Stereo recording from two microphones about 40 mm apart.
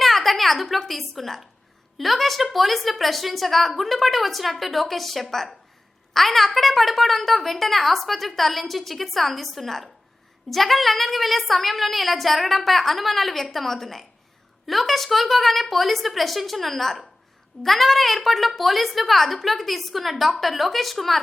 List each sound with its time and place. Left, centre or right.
0.0 s a woman's voice: centre